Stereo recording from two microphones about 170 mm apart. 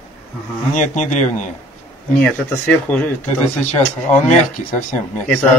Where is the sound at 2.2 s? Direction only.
10° left (ahead or behind).